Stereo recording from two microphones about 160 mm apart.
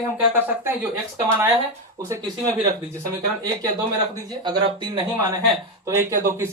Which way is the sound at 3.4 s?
20° right (ahead or behind).